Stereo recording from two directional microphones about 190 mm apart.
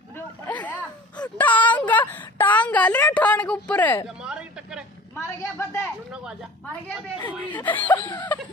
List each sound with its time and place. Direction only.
0.5 s a sound: 10° left (ahead or behind)
1.4 s a woman's voice: 10° left (ahead or behind)
4.2 s a sound: 5° right (ahead or behind)
5.1 s a woman's voice: 15° left (ahead or behind)
7.2 s speech: 10° left (ahead or behind)
8.0 s snicker: 25° left (ahead or behind)